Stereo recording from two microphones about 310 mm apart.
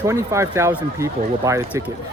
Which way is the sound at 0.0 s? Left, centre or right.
Centre.